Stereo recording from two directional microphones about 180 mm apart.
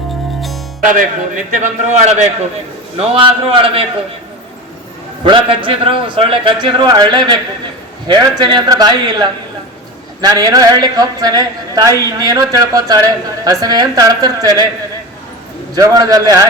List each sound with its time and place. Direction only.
1.5 s a man's voice: 40° right (ahead or behind)
5.2 s a woman's voice: 25° right (ahead or behind)
15.7 s a woman's voice: 20° right (ahead or behind)